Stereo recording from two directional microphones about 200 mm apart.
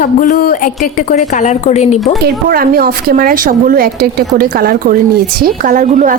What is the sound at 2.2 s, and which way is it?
A woman's voice, 50° right (ahead or behind).